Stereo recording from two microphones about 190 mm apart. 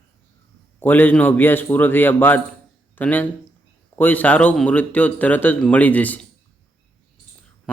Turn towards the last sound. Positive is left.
turn(degrees=10)  # may be behind; listen again after turning